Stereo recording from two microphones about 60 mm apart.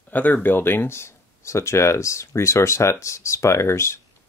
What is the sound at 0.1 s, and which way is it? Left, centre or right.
Speech, left.